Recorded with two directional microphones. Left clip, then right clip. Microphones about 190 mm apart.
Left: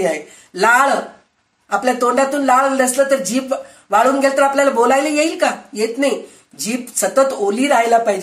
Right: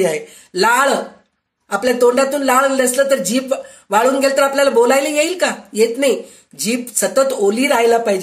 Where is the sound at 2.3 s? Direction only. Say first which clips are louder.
Even; 45° right (ahead or behind).